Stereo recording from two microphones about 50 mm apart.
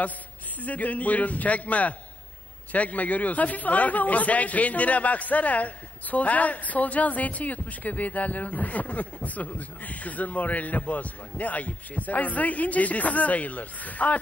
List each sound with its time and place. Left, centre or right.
0.6 s a man's voice: left